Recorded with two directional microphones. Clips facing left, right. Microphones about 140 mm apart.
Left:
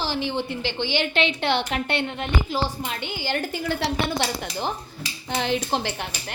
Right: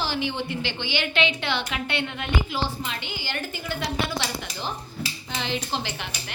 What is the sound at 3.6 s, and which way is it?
Speech, 75° left (ahead or behind).